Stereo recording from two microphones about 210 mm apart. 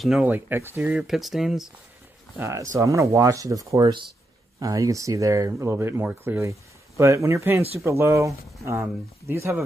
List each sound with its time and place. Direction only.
0.0 s speech: 5° right (ahead or behind)
2.3 s speech: 15° right (ahead or behind)
9.3 s speech: 10° right (ahead or behind)